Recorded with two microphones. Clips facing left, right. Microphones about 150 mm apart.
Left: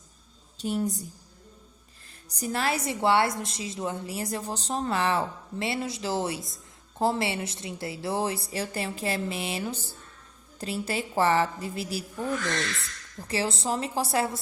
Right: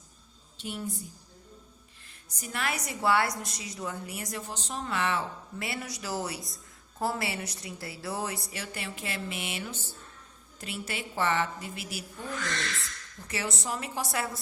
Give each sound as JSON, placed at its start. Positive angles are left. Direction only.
{"t": 0.5, "sound": "a woman's voice", "side_deg": 40}
{"t": 2.3, "sound": "a woman's voice", "side_deg": 35}
{"t": 13.2, "sound": "a woman's voice", "side_deg": 30}